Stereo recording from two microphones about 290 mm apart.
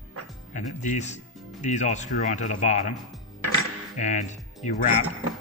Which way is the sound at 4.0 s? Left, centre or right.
Left.